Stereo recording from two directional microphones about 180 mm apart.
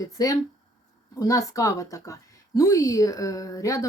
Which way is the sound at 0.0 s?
20° left (ahead or behind).